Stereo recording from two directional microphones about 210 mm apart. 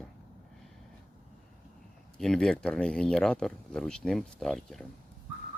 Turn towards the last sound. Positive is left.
turn(degrees=0)  # may be behind; listen again after turning